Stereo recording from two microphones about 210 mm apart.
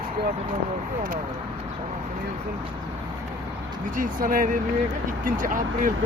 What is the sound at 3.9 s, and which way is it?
Speech, 40° right (ahead or behind).